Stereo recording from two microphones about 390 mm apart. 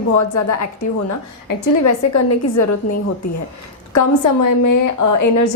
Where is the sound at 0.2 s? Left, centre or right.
Left.